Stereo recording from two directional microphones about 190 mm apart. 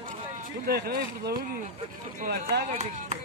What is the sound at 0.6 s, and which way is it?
Speech, 55° right (ahead or behind).